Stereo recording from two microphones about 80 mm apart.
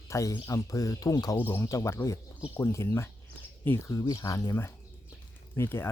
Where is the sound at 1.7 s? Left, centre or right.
Left.